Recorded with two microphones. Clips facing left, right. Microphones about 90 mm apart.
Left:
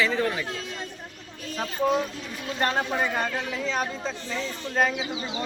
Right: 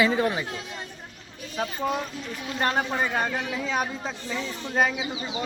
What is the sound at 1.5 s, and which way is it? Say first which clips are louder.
Speech: left 3 dB; 5° right (ahead or behind).